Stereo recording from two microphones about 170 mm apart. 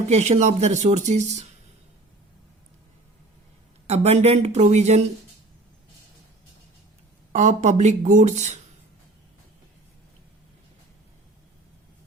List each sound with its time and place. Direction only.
0.1 s speech: 40° right (ahead or behind)
3.8 s speech: 40° right (ahead or behind)
7.3 s speech: 45° right (ahead or behind)